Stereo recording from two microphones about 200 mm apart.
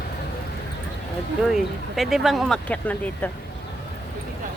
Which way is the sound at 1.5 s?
Centre (ahead or behind).